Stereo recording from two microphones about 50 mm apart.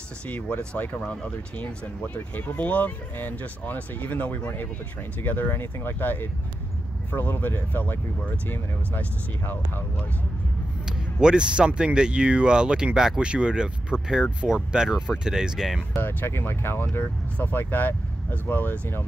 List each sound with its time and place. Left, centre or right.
0.3 s speech: left
11.1 s speech: centre
15.9 s speech: left
16.3 s speech: left
17.0 s speech: left